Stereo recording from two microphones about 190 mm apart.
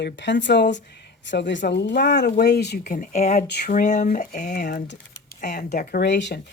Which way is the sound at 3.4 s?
60° left (ahead or behind).